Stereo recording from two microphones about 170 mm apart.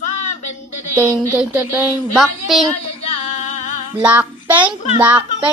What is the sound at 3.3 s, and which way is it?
Music, 45° left (ahead or behind).